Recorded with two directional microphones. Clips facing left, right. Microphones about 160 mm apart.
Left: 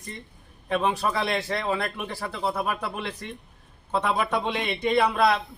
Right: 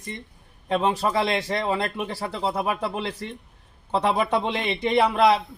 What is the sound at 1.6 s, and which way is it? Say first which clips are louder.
A man's voice: right 2 dB; 25° right (ahead or behind).